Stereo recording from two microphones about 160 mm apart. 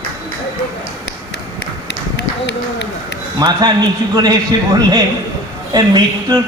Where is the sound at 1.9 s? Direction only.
90° left.